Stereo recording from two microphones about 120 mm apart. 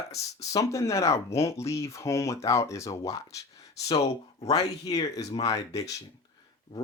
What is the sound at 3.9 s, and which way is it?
Speech, 65° left (ahead or behind).